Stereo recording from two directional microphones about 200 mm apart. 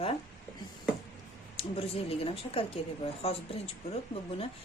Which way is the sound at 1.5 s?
30° left (ahead or behind).